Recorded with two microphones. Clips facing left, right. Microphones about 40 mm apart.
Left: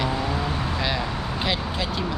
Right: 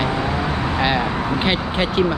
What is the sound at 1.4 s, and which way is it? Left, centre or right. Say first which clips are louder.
Speech: right 6 dB; right.